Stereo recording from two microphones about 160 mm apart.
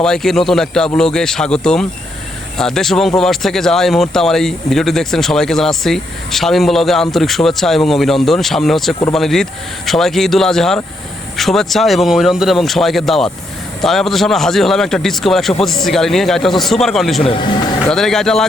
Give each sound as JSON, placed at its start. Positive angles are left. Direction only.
{"t": 0.0, "sound": "speech", "side_deg": 5}
{"t": 17.2, "sound": "speech", "side_deg": 30}
{"t": 17.8, "sound": "speech", "side_deg": 5}